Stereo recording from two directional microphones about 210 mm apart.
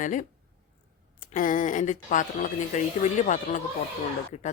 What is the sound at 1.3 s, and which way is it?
Speech, 40° left (ahead or behind).